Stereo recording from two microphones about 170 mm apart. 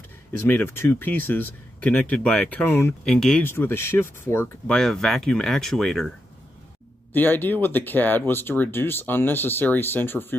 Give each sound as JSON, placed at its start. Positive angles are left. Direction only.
{"t": 0.5, "sound": "speech", "side_deg": 10}
{"t": 3.4, "sound": "speech", "side_deg": 15}
{"t": 4.7, "sound": "speech", "side_deg": 0}
{"t": 7.2, "sound": "speech", "side_deg": 10}